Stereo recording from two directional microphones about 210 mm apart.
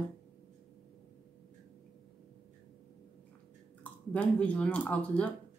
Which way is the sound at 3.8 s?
5° left (ahead or behind).